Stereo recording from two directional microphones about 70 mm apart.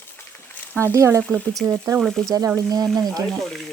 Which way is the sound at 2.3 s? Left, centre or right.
Right.